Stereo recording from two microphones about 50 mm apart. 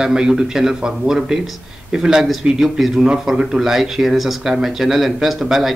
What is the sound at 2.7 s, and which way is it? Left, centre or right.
Speech, centre.